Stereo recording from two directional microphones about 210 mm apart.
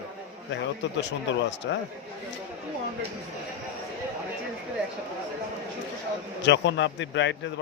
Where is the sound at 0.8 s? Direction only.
55° left (ahead or behind).